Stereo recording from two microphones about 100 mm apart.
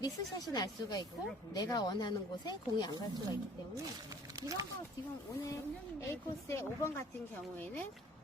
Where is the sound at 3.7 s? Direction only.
35° right (ahead or behind).